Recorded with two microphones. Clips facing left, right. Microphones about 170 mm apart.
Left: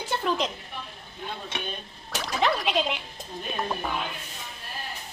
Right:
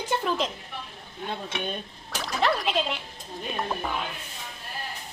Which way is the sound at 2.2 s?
Centre (ahead or behind).